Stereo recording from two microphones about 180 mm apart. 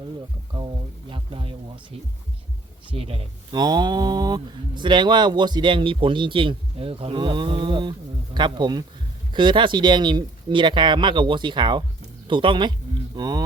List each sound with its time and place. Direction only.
1.1 s speech: 30° right (ahead or behind)
2.9 s speech: 35° right (ahead or behind)